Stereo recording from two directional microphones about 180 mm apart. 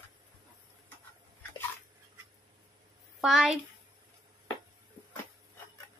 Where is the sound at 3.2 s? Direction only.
Centre (ahead or behind).